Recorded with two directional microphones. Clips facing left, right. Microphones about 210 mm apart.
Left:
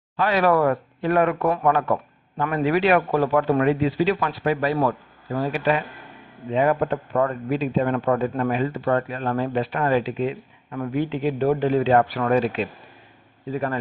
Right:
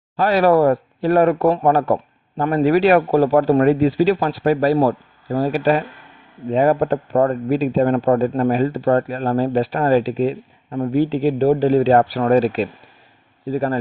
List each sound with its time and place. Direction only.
0.2 s speech: 40° right (ahead or behind)